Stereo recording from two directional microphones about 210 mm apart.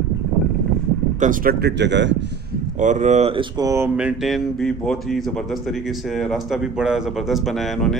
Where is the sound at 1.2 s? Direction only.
40° right (ahead or behind); by 2.1 s 60° right (ahead or behind).